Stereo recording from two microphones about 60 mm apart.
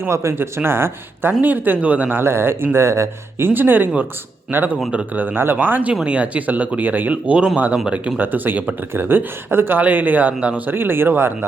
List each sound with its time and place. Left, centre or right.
0.0 s speech: right
1.4 s speech: right
2.2 s speech: right
5.9 s speech: centre
10.8 s speech: right